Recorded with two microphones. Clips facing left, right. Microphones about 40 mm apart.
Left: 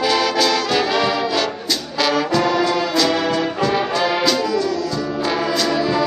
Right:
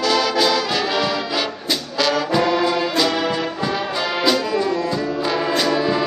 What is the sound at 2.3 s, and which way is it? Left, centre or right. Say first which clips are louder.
Brass instrument: right 1 dB; centre.